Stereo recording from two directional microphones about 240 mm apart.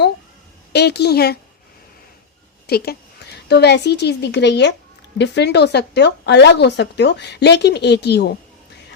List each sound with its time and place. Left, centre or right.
0.7 s speech: left
2.6 s speech: left